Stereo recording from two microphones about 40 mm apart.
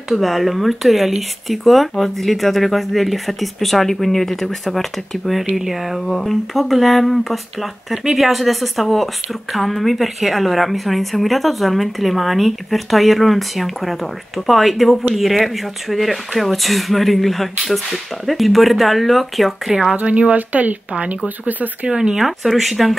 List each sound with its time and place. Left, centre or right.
0.1 s speech: centre
20.0 s speech: right
21.8 s speech: right
22.2 s speech: centre